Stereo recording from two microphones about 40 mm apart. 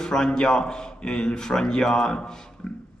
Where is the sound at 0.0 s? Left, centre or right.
Centre.